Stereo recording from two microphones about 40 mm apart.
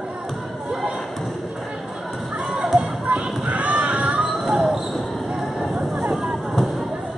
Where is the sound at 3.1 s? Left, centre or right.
Right.